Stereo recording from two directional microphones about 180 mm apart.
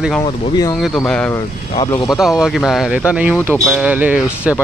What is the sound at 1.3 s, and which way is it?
Speech, 20° left (ahead or behind).